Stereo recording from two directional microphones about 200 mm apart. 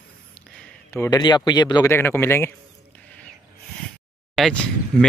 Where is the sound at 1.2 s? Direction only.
20° left (ahead or behind).